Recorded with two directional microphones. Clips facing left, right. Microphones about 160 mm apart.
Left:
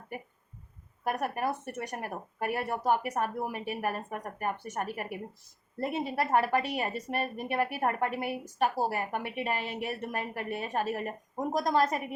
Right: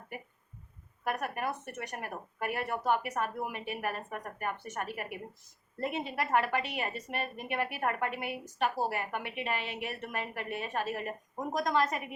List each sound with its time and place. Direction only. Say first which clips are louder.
1.0 s speech: left 3 dB; 40° left (ahead or behind)